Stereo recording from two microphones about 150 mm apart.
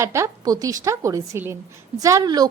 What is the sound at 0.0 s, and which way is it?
A woman's voice, 20° right (ahead or behind).